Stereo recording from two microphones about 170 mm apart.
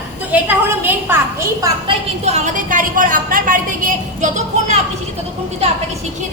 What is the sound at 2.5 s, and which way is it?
A woman's voice, 50° right (ahead or behind).